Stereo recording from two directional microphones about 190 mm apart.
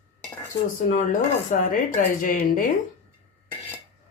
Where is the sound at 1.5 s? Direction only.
45° left (ahead or behind).